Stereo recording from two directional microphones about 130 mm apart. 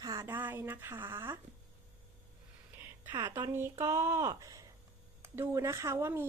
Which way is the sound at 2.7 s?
15° right (ahead or behind).